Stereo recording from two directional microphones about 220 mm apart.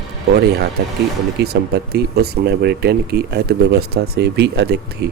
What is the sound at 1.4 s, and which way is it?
Speech, 45° right (ahead or behind).